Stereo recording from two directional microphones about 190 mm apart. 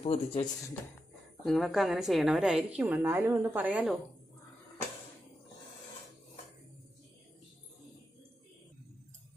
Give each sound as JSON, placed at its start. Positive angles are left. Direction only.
{"t": 0.0, "sound": "speech", "side_deg": 30}
{"t": 1.5, "sound": "a woman's voice", "side_deg": 0}